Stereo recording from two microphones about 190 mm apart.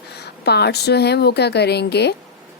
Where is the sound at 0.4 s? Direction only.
60° left (ahead or behind).